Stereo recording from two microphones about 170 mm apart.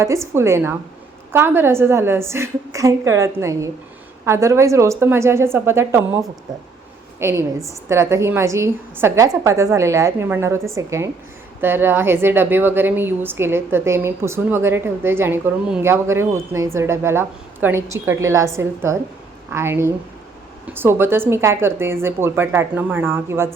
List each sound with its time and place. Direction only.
0.0 s a woman's voice: 15° right (ahead or behind)
7.2 s a woman's voice: 15° right (ahead or behind)